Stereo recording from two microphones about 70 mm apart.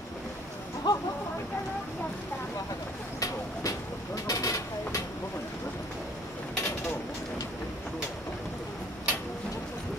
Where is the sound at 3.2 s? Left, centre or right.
Left.